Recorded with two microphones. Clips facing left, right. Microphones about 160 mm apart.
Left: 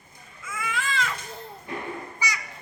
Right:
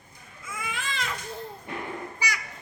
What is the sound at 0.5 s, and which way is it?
Baby cry, 15° right (ahead or behind).